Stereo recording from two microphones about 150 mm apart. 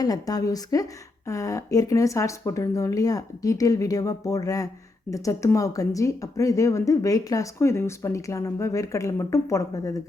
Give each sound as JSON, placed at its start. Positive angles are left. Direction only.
{"t": 0.0, "sound": "speech", "side_deg": 25}